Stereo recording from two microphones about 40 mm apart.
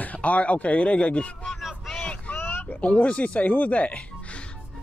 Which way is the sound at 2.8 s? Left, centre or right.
Left.